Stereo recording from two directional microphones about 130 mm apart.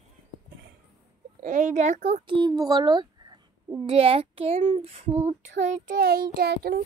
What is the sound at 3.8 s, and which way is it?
Speech, 45° right (ahead or behind).